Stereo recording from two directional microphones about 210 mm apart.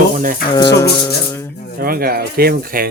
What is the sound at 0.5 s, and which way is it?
Speech, 15° left (ahead or behind).